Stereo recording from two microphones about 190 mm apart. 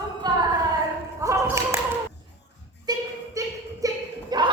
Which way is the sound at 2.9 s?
20° right (ahead or behind).